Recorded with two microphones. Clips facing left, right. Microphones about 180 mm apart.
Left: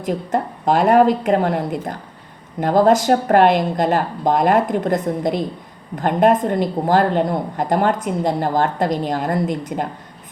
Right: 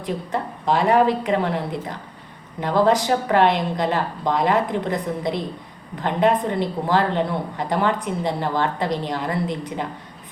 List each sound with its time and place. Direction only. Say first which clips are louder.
0.0 s a woman's voice: left 5 dB; 45° left (ahead or behind)